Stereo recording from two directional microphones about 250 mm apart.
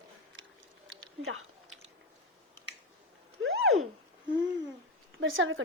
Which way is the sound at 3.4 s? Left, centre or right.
Right.